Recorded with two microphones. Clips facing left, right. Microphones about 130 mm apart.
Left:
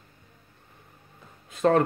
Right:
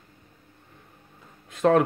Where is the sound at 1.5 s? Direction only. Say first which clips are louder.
Right 1 dB; centre (ahead or behind).